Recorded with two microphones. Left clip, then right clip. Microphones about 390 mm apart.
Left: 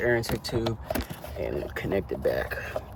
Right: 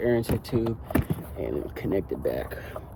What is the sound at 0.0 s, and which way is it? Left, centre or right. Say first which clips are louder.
Speech: even; centre.